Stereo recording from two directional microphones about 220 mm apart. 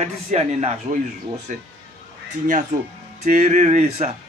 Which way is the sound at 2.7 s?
35° right (ahead or behind).